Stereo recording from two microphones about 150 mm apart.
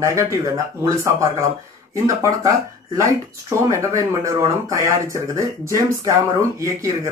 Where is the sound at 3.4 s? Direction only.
20° right (ahead or behind).